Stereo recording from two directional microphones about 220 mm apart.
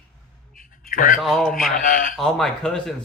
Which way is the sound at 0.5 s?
40° left (ahead or behind).